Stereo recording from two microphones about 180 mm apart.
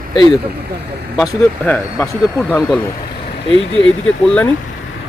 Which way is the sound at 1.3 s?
15° left (ahead or behind).